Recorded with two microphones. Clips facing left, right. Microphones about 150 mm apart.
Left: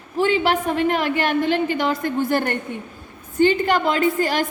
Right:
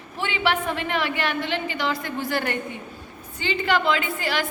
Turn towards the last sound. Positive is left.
turn(degrees=45)  # may be behind; listen again after turning